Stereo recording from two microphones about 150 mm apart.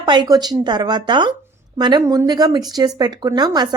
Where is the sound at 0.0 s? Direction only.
30° right (ahead or behind).